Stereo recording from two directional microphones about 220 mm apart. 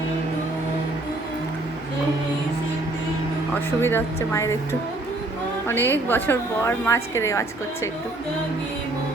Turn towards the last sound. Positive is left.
turn(degrees=15)  # may be behind; listen again after turning